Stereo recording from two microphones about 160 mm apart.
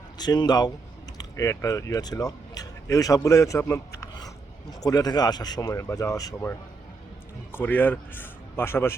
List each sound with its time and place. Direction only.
0.2 s speech: 25° left (ahead or behind)
4.8 s a man's voice: 25° left (ahead or behind)